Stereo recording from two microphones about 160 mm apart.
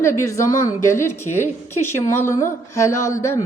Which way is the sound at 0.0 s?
15° left (ahead or behind).